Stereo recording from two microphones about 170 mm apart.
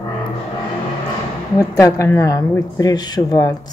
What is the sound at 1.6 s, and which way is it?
Speech, 20° left (ahead or behind).